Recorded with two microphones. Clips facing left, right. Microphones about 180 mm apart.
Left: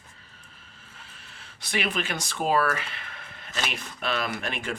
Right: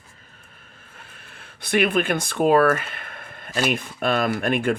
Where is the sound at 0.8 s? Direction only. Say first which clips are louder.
Right 3 dB; 55° right (ahead or behind).